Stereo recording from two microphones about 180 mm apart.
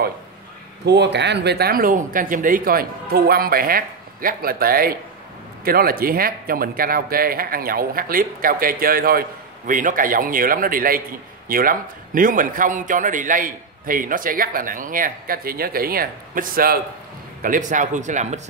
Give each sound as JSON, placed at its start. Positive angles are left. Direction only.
{"t": 0.8, "sound": "a man's voice", "side_deg": -70}